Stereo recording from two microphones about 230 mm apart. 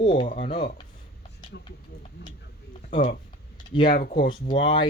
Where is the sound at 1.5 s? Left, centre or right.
Left.